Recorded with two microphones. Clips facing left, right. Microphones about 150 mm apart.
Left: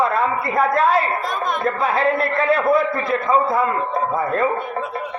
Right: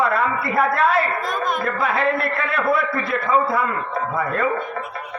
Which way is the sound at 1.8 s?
30° left (ahead or behind).